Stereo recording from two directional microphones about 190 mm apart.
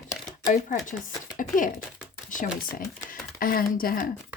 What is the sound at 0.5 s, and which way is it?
Speech, 45° left (ahead or behind).